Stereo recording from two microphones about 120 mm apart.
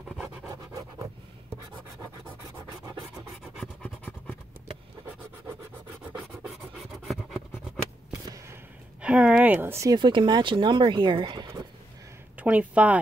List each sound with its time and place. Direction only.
0.5 s a sound: 30° right (ahead or behind)
3.8 s a sound: 10° left (ahead or behind)
5.9 s scratch: 15° right (ahead or behind)
9.0 s speech: 10° right (ahead or behind)
9.8 s speech: 40° right (ahead or behind)
12.4 s speech: 10° right (ahead or behind)